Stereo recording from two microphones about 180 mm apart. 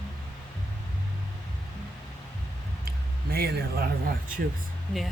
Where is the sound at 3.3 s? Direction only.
60° right (ahead or behind).